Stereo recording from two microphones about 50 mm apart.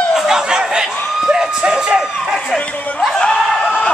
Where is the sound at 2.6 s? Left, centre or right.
Left.